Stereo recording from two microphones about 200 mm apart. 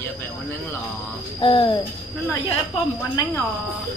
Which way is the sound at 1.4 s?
25° left (ahead or behind).